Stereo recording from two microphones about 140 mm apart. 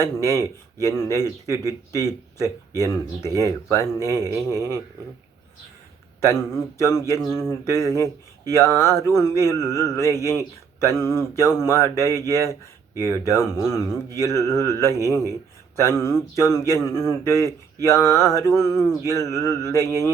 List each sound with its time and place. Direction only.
0.0 s speech: 20° left (ahead or behind)
6.1 s speech: 20° left (ahead or behind)